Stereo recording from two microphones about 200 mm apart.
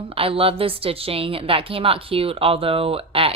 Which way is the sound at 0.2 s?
30° right (ahead or behind).